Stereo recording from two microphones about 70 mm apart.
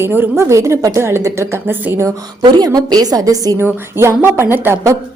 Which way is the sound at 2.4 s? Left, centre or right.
Right.